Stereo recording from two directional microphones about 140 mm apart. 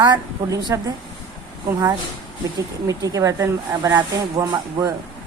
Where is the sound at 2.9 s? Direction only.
25° right (ahead or behind).